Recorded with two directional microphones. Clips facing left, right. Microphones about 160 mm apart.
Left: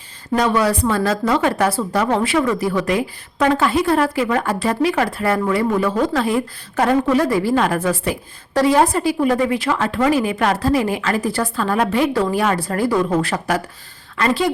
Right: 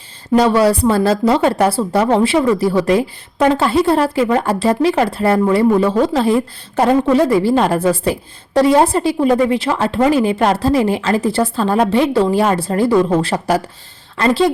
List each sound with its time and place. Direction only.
0.3 s a woman's voice: 30° right (ahead or behind)